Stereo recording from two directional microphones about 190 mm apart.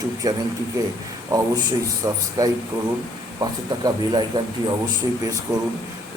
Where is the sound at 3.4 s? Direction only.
20° right (ahead or behind).